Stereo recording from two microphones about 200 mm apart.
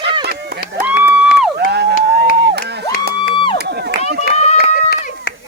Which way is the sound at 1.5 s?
55° right (ahead or behind).